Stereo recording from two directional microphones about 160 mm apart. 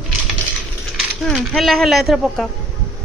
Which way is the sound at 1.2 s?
Centre (ahead or behind).